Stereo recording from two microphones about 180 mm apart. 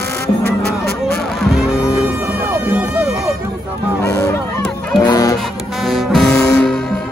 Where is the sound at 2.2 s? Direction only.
10° right (ahead or behind).